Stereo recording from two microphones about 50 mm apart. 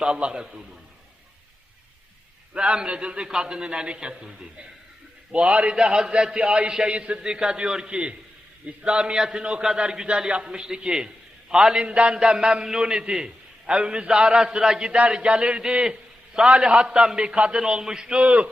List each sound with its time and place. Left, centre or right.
0.0 s a man's voice: centre
2.5 s a man's voice: centre
5.3 s a man's voice: right
18.2 s a man's voice: right